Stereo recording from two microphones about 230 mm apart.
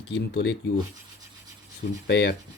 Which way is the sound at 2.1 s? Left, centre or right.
Left.